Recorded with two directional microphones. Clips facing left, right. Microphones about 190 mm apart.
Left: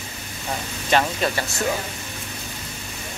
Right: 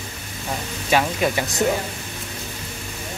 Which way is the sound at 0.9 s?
10° right (ahead or behind).